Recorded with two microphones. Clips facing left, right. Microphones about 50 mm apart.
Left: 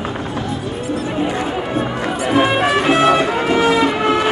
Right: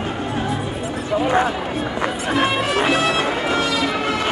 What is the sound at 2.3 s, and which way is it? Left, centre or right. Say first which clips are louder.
Music: left 6 dB; left.